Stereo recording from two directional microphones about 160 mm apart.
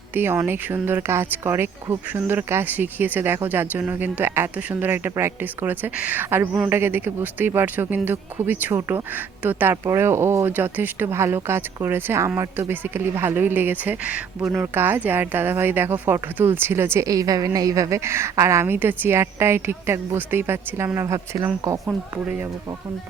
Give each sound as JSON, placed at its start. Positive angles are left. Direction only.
{"t": 0.1, "sound": "speech", "side_deg": -10}
{"t": 21.8, "sound": "speech", "side_deg": -10}